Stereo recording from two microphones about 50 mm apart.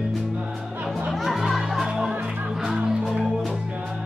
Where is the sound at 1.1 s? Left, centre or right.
Centre.